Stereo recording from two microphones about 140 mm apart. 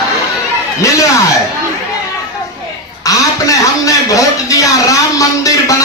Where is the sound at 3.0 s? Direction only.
25° left (ahead or behind).